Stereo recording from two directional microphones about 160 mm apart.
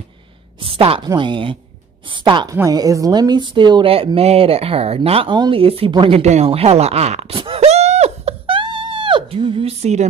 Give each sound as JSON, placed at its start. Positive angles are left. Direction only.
{"t": 0.6, "sound": "a woman's voice", "side_deg": -35}